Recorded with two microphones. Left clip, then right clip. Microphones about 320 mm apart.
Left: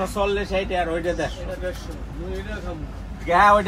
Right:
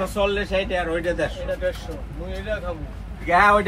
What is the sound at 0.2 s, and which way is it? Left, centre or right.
Speech, centre.